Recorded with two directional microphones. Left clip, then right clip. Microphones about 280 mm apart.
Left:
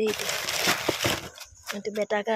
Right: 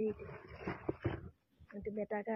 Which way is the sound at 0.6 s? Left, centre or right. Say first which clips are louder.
Left 15 dB; left.